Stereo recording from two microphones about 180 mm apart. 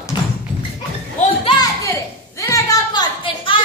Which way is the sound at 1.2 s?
30° left (ahead or behind).